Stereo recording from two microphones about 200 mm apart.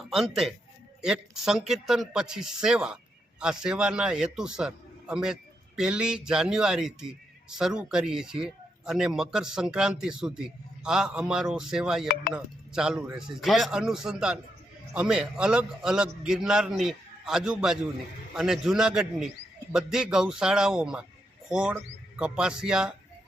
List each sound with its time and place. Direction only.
0.0 s speech: centre (ahead or behind)